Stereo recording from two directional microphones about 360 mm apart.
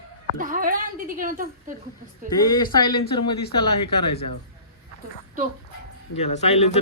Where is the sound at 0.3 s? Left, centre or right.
Right.